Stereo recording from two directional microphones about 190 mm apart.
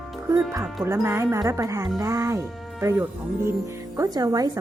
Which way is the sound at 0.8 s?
15° right (ahead or behind).